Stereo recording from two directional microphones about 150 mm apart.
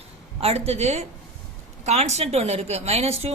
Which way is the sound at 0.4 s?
45° right (ahead or behind).